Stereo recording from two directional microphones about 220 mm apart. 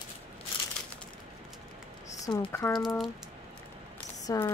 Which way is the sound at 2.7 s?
Centre (ahead or behind).